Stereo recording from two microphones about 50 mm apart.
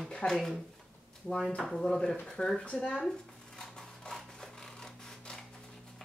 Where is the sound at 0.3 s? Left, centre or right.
Centre.